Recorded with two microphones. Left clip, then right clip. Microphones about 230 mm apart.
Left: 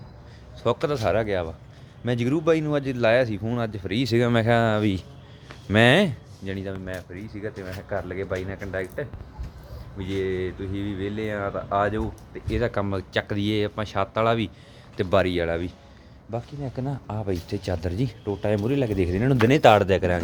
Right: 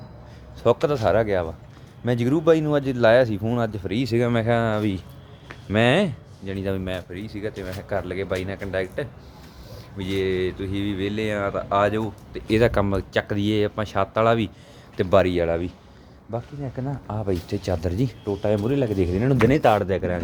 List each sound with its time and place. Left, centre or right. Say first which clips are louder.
0.6 s speech: right 4 dB; centre
6.7 s speech: right 10 dB; right
7.1 s speech: right 3 dB; centre
12.5 s speech: right 7 dB; right
12.7 s speech: right 4 dB; centre
17.2 s speech: right 4 dB; centre